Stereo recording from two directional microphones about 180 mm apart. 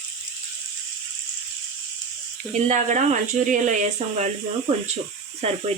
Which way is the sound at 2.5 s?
40° right (ahead or behind).